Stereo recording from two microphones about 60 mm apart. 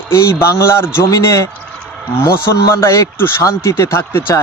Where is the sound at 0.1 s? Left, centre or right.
Left.